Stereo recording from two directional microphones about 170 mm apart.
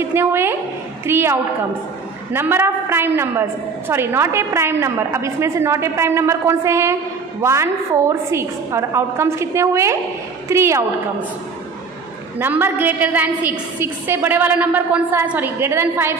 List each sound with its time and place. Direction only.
0.0 s a woman's voice: 15° right (ahead or behind)
12.4 s a woman's voice: 10° right (ahead or behind)